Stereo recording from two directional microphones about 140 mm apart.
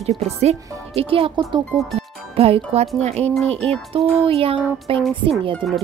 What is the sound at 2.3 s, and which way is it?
Speech, 45° right (ahead or behind).